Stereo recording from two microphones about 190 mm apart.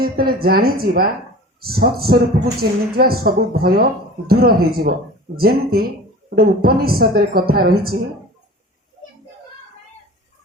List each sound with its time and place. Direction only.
0.0 s a woman's voice: 55° right (ahead or behind)